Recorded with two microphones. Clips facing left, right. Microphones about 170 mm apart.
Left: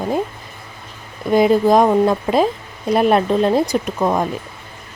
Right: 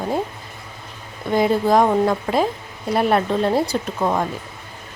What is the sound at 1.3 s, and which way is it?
Speech, 20° left (ahead or behind).